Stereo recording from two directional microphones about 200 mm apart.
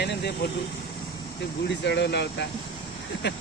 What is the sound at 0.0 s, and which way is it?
Vehicle, 55° left (ahead or behind).